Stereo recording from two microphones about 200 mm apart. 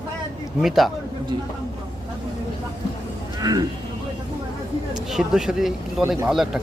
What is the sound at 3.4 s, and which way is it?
Speech, 20° right (ahead or behind).